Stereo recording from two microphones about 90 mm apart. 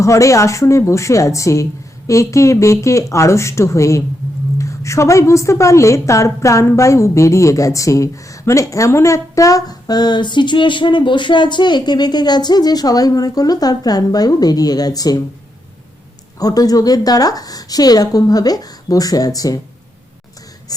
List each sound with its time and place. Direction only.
0.0 s a woman's voice: 35° left (ahead or behind)
16.4 s a woman's voice: 45° left (ahead or behind)